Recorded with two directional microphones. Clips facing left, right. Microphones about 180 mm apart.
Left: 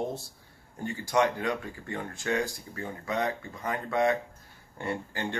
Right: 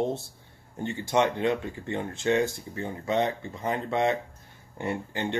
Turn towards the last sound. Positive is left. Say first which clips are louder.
# right 3 dB
turn(degrees=-20)  # may be behind; listen again after turning